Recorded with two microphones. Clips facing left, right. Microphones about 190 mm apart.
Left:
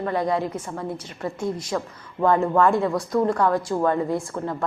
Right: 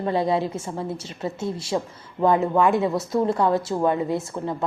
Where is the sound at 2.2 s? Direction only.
15° right (ahead or behind).